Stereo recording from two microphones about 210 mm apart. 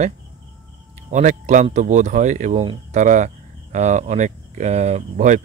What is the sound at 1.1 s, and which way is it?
Speech, 35° right (ahead or behind).